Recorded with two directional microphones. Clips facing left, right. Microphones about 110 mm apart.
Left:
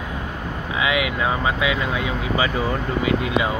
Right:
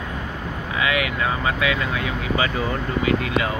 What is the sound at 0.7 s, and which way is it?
Speech, 20° left (ahead or behind).